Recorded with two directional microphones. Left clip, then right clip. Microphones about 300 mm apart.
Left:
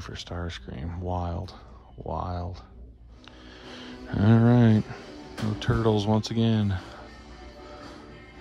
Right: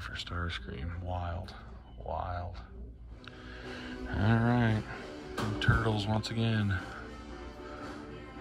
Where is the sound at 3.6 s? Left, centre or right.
Left.